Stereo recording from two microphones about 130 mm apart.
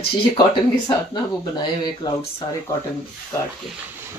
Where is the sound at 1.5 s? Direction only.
35° left (ahead or behind).